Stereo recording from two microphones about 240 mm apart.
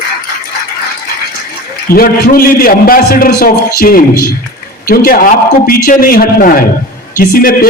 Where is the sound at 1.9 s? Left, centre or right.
Left.